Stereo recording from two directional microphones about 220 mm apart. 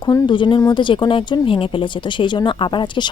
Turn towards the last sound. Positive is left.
turn(degrees=20)  # may be behind; listen again after turning